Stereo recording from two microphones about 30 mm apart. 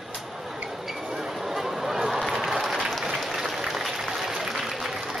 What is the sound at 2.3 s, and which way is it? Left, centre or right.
Applause, centre.